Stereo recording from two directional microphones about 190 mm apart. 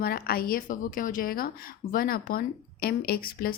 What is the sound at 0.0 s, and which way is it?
A woman's voice, 50° left (ahead or behind).